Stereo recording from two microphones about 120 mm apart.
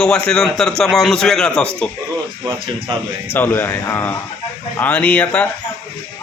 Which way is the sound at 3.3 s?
20° left (ahead or behind).